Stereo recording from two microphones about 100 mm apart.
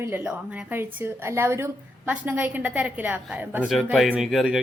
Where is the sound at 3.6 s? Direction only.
Centre (ahead or behind).